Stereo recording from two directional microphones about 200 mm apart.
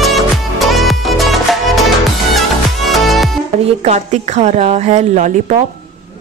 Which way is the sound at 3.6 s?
35° right (ahead or behind).